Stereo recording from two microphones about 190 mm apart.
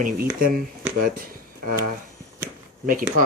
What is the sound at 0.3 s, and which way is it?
Speech, 50° right (ahead or behind).